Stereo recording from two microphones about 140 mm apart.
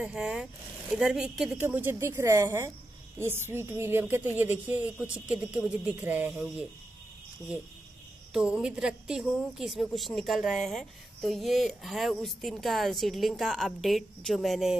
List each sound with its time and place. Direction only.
0.0 s a woman's voice: 5° right (ahead or behind)
8.3 s a woman's voice: 5° right (ahead or behind)